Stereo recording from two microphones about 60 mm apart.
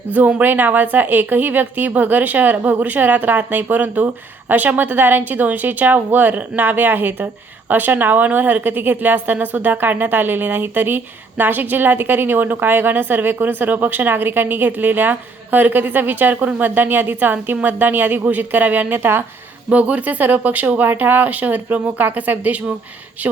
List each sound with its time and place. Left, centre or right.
0.1 s a woman's voice: right
19.7 s speech: right